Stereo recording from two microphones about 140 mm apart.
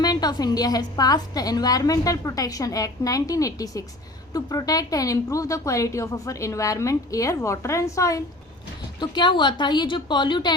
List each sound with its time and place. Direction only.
0.0 s speech: 30° left (ahead or behind)
9.0 s a woman's voice: 35° left (ahead or behind)